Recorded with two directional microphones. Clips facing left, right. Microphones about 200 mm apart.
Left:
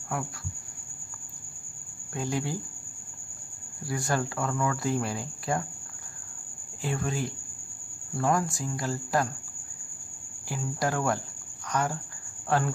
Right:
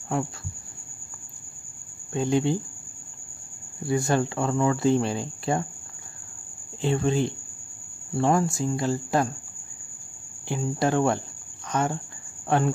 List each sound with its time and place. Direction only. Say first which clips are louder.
0.1 s speech: right 6 dB; 25° right (ahead or behind)
2.1 s speech: right 8 dB; 25° right (ahead or behind)
3.8 s speech: right 6 dB; 25° right (ahead or behind)
6.8 s speech: right 7 dB; 25° right (ahead or behind)
10.5 s speech: right 6 dB; 25° right (ahead or behind)